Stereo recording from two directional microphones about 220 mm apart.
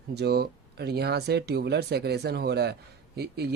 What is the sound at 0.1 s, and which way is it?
Speech, 50° right (ahead or behind).